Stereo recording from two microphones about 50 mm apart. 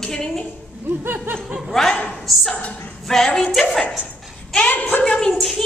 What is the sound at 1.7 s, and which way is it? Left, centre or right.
A woman's voice, centre.